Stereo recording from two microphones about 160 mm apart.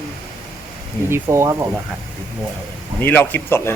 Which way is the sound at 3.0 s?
10° left (ahead or behind).